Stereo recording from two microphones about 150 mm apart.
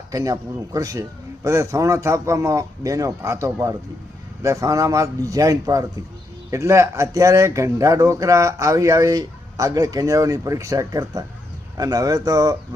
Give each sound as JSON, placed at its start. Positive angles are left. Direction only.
{"t": 0.1, "sound": "speech", "side_deg": -20}